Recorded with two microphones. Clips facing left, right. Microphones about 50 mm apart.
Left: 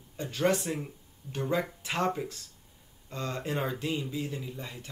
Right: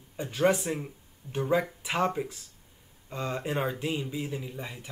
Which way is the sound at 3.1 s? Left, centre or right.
Centre.